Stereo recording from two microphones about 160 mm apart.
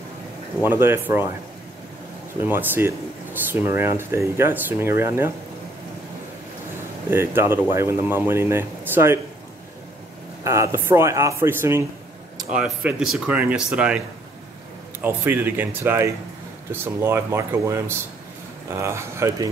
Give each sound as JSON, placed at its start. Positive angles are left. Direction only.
{"t": 0.7, "sound": "speech", "side_deg": -15}
{"t": 2.4, "sound": "speech", "side_deg": -10}
{"t": 7.1, "sound": "speech", "side_deg": -15}
{"t": 10.4, "sound": "speech", "side_deg": -20}
{"t": 12.5, "sound": "speech", "side_deg": -5}